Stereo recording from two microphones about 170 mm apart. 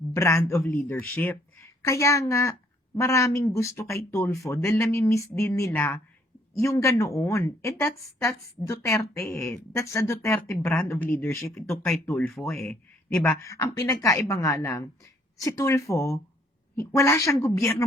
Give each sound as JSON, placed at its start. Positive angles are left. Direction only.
{"t": 0.1, "sound": "speech", "side_deg": 15}
{"t": 13.4, "sound": "speech", "side_deg": 15}